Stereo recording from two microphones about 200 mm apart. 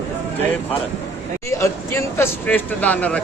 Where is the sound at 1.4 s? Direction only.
15° left (ahead or behind).